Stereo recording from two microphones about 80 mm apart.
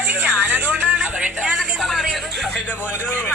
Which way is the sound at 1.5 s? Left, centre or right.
Centre.